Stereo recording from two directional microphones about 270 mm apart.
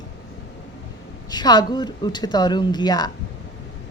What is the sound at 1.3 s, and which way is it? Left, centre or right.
A woman's voice, centre.